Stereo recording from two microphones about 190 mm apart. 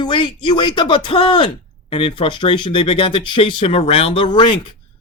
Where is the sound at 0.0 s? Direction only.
25° left (ahead or behind).